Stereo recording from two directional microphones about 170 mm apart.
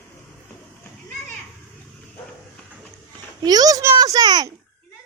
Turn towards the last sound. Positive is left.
turn(degrees=-25)  # may be behind; listen again after turning